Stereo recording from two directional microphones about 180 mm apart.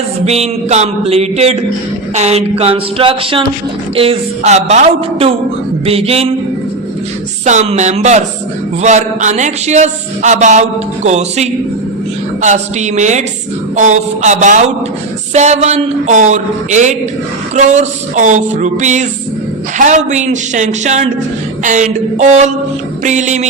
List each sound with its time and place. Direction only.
0.3 s speech: 35° right (ahead or behind)
7.4 s speech: 40° right (ahead or behind)